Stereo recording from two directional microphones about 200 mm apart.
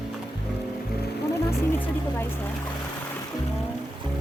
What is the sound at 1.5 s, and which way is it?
Music, 10° left (ahead or behind).